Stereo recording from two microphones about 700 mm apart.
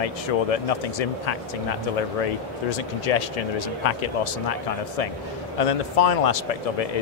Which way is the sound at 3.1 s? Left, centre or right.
Left.